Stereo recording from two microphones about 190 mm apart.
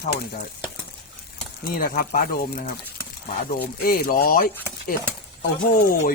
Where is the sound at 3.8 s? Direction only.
50° left (ahead or behind).